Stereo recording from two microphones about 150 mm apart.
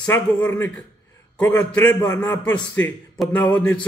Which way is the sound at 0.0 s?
10° left (ahead or behind).